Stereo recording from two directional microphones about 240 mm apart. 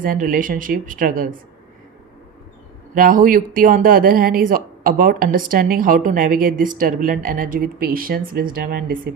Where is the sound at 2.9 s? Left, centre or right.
Right.